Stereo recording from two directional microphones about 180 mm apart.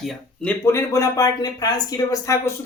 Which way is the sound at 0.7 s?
15° left (ahead or behind).